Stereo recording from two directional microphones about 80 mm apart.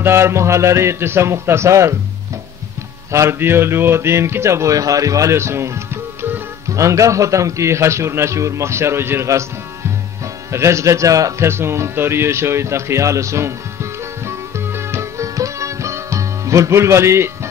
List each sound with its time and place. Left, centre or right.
0.0 s a man's voice: right
3.1 s a man's voice: right
6.7 s a man's voice: right
10.5 s music: right